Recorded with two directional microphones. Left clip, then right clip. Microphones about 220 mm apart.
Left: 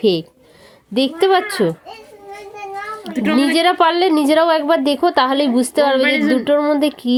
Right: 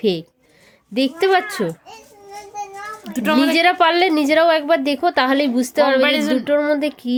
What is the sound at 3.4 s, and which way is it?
A woman's voice, 5° right (ahead or behind).